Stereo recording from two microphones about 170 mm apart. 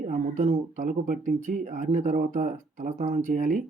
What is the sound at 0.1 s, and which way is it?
Speech, 45° right (ahead or behind).